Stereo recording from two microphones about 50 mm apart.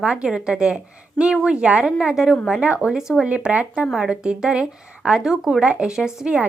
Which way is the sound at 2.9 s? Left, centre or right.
Centre.